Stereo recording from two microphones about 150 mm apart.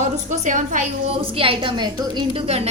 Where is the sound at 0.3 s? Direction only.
60° right (ahead or behind).